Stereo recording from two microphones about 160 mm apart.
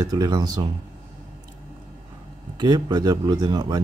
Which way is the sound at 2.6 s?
25° right (ahead or behind).